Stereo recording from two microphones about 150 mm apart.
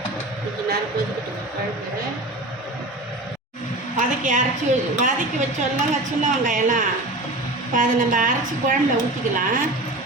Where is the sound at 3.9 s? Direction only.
55° right (ahead or behind).